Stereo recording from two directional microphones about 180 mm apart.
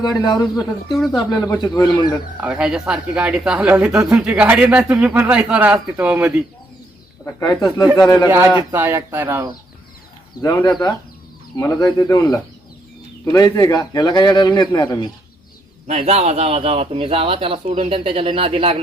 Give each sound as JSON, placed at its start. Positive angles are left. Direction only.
{"t": 0.0, "sound": "a man's voice", "side_deg": 20}
{"t": 0.5, "sound": "speech", "side_deg": 0}
{"t": 1.1, "sound": "a man's voice", "side_deg": 20}
{"t": 2.4, "sound": "speech", "side_deg": -5}
{"t": 7.3, "sound": "a man's voice", "side_deg": 20}
{"t": 8.7, "sound": "speech", "side_deg": -15}
{"t": 10.4, "sound": "a man's voice", "side_deg": 20}
{"t": 15.9, "sound": "a man's voice", "side_deg": -35}